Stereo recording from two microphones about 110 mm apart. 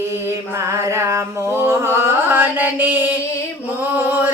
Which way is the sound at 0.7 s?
25° right (ahead or behind).